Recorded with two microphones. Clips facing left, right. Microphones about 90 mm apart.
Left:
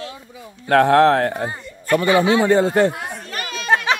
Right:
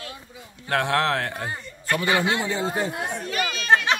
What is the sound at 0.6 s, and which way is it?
Speech, 40° left (ahead or behind).